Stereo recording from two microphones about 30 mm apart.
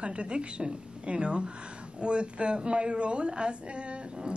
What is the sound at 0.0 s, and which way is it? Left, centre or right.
A woman's voice, right.